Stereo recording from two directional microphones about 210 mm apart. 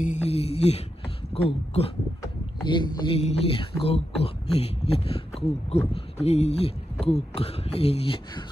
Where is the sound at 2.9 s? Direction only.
25° left (ahead or behind).